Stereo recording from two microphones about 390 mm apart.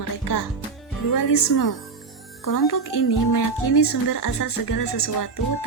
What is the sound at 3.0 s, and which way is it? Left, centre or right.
Speech, left.